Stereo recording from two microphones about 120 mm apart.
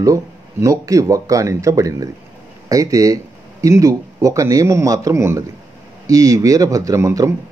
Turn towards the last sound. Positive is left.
turn(degrees=-25)  # may be behind; listen again after turning